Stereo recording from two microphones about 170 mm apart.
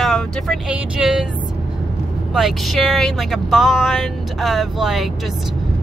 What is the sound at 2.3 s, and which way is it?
Speech, centre (ahead or behind).